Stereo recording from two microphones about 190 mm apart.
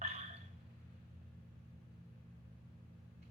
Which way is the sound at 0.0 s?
35° right (ahead or behind).